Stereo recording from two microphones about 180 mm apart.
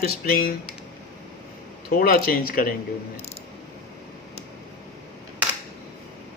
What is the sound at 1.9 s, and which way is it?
Speech, 55° left (ahead or behind).